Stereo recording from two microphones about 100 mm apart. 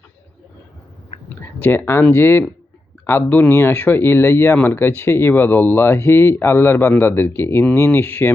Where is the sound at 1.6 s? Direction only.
20° left (ahead or behind).